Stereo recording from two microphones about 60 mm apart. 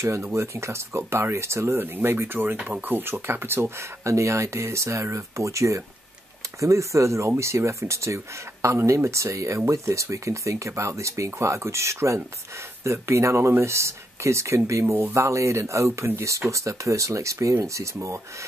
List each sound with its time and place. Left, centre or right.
0.0 s speech: right